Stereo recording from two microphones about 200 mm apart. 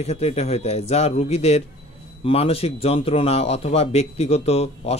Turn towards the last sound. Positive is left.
turn(degrees=30)  # may be behind; listen again after turning